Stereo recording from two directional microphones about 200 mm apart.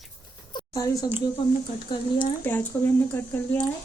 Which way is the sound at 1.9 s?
25° left (ahead or behind).